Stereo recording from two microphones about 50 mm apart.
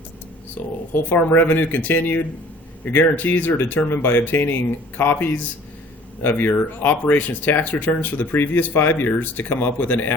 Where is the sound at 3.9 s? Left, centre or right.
Left.